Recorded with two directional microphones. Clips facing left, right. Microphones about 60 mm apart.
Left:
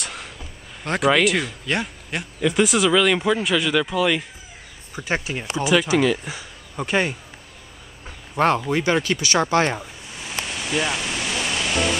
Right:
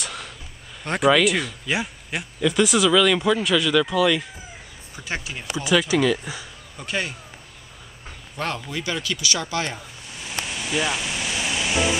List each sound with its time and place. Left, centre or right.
0.0 s a sound: centre
0.8 s speech: centre
2.4 s speech: centre
4.9 s speech: left
6.8 s speech: left
8.6 s speech: left
10.1 s music: centre